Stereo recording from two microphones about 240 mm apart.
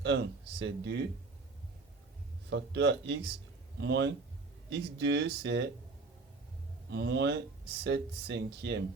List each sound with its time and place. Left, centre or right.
0.0 s speech: right
2.5 s speech: right
6.9 s speech: right